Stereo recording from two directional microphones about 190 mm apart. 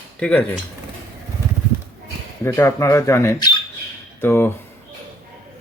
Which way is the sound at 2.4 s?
15° left (ahead or behind).